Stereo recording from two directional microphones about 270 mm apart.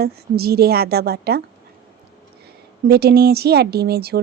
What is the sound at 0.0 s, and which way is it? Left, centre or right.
A woman's voice, right.